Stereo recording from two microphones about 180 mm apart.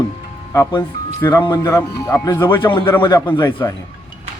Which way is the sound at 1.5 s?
15° left (ahead or behind).